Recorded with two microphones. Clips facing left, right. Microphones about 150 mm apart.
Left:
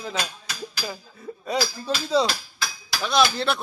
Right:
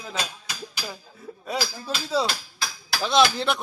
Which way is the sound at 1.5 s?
5° right (ahead or behind).